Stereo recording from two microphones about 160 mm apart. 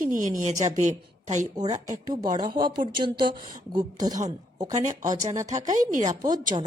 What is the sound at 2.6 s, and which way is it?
Speech, 25° right (ahead or behind).